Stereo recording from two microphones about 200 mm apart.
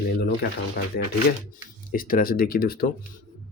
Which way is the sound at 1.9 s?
45° left (ahead or behind).